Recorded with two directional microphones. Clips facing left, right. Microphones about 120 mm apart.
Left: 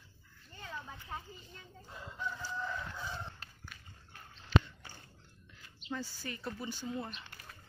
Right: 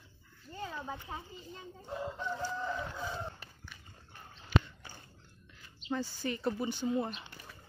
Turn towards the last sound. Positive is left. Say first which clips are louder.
# right 7 dB
turn(degrees=-20)  # may be behind; listen again after turning